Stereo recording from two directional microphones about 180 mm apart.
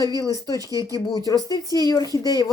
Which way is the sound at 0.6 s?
20° right (ahead or behind).